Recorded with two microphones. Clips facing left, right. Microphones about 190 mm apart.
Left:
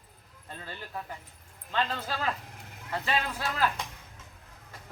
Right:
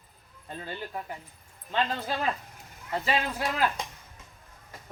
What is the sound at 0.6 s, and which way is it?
Speech, 20° right (ahead or behind).